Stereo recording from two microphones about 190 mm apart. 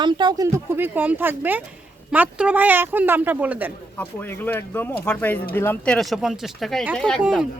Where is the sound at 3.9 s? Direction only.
10° left (ahead or behind).